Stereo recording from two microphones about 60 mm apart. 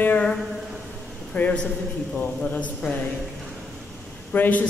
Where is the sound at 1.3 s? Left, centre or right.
Left.